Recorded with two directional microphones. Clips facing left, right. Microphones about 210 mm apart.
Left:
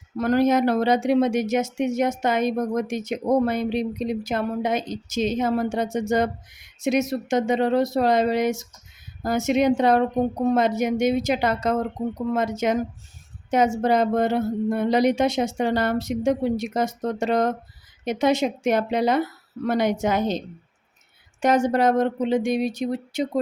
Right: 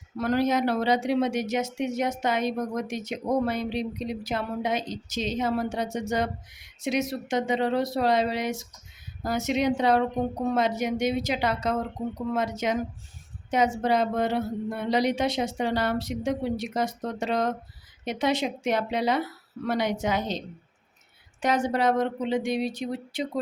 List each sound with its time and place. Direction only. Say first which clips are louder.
0.2 s speech: left 5 dB; 50° left (ahead or behind)
21.4 s speech: left 5 dB; 45° left (ahead or behind)